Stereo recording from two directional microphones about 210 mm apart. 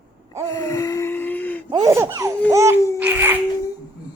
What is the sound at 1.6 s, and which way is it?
Speech, 20° right (ahead or behind).